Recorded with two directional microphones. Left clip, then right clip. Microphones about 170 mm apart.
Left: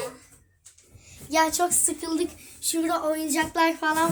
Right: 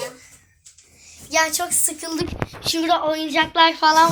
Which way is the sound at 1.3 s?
25° left (ahead or behind).